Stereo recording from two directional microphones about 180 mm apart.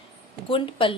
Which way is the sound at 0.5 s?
30° left (ahead or behind).